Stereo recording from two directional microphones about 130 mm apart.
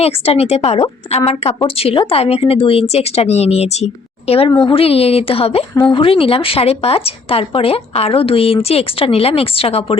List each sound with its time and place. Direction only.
0.0 s speech: 50° left (ahead or behind)